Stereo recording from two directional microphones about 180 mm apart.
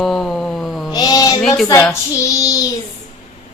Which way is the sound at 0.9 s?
20° left (ahead or behind).